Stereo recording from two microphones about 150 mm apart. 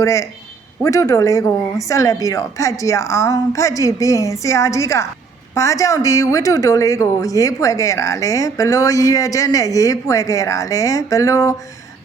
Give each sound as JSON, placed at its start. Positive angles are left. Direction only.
{"t": 0.0, "sound": "speech", "side_deg": 20}